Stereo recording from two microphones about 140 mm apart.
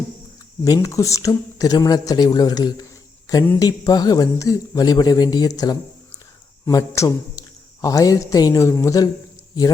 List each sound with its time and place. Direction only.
0.6 s speech: 25° left (ahead or behind)